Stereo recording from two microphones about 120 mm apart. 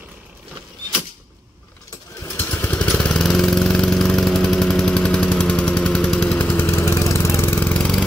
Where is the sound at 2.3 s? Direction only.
15° left (ahead or behind).